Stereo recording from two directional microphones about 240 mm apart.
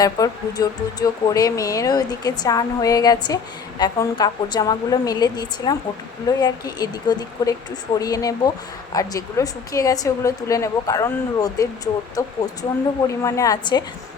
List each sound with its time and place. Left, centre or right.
0.0 s a woman's voice: centre